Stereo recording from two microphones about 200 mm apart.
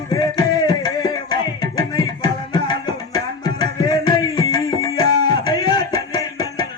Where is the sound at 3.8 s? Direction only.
20° left (ahead or behind).